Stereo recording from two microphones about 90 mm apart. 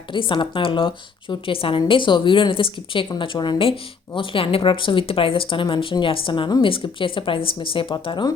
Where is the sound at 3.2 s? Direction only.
65° left (ahead or behind).